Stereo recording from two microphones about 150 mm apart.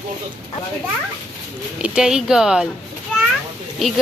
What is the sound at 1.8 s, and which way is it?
Speech, 5° right (ahead or behind).